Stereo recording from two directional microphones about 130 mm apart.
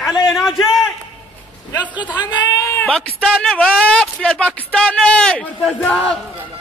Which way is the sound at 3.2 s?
5° left (ahead or behind).